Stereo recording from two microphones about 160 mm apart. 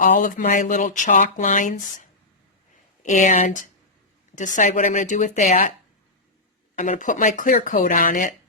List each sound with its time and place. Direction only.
0.0 s speech: 55° left (ahead or behind)
6.7 s speech: 50° left (ahead or behind)